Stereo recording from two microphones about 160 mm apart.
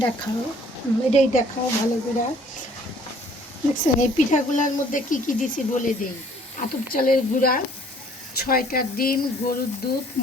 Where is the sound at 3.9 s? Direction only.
50° left (ahead or behind).